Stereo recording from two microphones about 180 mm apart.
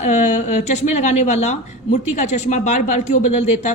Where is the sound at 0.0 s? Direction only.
40° left (ahead or behind).